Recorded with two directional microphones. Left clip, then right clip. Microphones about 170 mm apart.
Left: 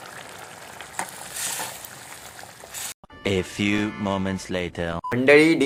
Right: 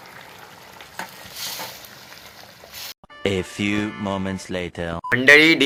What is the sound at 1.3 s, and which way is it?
Vehicle, 30° left (ahead or behind).